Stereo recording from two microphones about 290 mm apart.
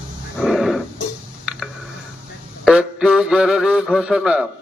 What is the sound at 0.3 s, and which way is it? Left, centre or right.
Wild animals, centre.